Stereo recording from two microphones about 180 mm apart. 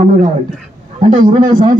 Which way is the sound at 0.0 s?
45° right (ahead or behind).